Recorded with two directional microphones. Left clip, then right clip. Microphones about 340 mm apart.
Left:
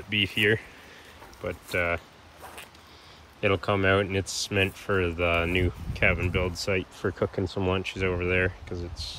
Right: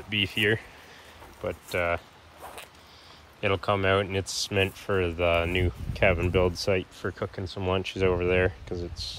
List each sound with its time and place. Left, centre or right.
0.1 s speech: centre
3.3 s speech: centre